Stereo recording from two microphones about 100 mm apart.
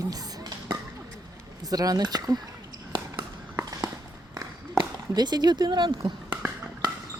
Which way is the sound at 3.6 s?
40° right (ahead or behind).